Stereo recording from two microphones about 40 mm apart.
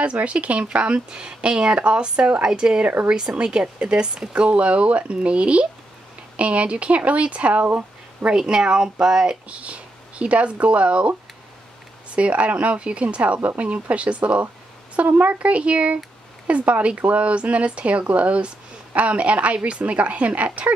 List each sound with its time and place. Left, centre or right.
0.0 s a woman's voice: right
4.3 s a woman's voice: right
7.6 s a sound: right
8.4 s speech: centre
9.5 s a woman's voice: right
12.2 s a woman's voice: right